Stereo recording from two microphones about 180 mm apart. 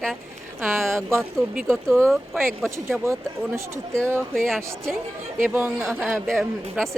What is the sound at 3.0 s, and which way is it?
Speech, 15° right (ahead or behind).